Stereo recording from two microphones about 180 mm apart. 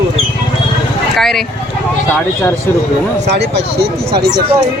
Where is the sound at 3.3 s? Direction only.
70° right (ahead or behind).